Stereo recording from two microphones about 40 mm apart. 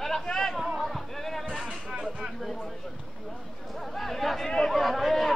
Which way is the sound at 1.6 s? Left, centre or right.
Right.